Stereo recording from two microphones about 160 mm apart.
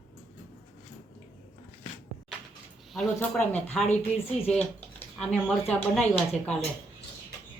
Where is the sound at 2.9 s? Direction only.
5° left (ahead or behind).